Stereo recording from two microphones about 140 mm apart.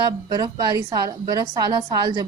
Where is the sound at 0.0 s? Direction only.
30° right (ahead or behind).